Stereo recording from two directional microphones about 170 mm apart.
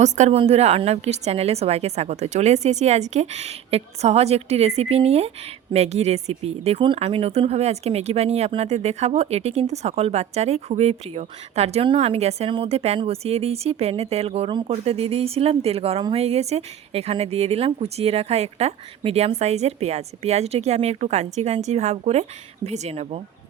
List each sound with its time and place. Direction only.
0.0 s speech: 40° right (ahead or behind)